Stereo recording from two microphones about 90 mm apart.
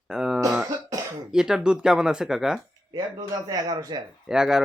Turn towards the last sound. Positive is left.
turn(degrees=-5)  # may be behind; listen again after turning